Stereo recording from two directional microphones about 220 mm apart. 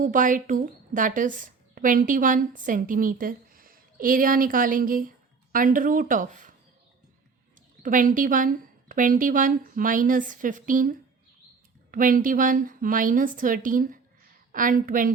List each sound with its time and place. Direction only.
0.0 s a woman's voice: 35° right (ahead or behind)
7.8 s a woman's voice: 35° right (ahead or behind)